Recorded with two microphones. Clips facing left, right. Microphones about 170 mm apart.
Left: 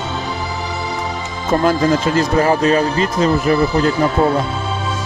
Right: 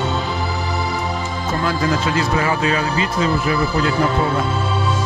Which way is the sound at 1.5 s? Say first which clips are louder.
Left 7 dB; 45° left (ahead or behind).